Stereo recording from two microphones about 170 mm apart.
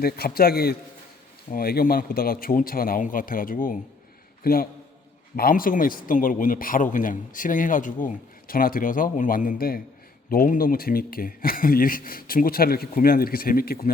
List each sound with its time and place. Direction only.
0.0 s speech: 65° left (ahead or behind)